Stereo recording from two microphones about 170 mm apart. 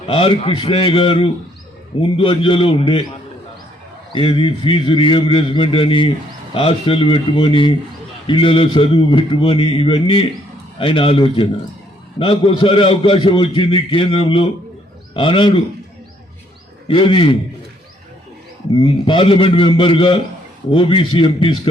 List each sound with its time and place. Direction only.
0.0 s a man's voice: 30° left (ahead or behind)
4.1 s a man's voice: 30° left (ahead or behind)
16.9 s a man's voice: 30° left (ahead or behind)
18.8 s a man's voice: 30° left (ahead or behind)